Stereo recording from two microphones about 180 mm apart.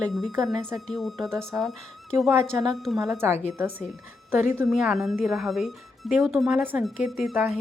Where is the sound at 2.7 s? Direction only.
Centre (ahead or behind).